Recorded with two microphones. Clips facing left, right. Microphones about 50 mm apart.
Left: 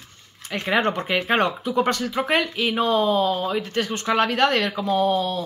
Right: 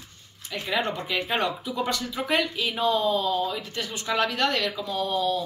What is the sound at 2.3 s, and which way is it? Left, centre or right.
Speech, left.